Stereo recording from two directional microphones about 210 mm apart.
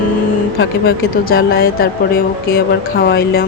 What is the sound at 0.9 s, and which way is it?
Speech, 45° left (ahead or behind).